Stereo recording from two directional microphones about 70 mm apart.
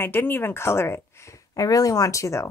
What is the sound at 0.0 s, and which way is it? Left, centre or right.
Speech, left.